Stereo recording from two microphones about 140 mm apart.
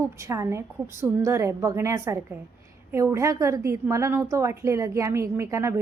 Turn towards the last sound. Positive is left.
turn(degrees=-20)  # may be behind; listen again after turning